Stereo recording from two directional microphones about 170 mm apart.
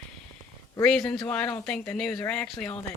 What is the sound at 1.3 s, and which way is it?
Speech, 10° left (ahead or behind).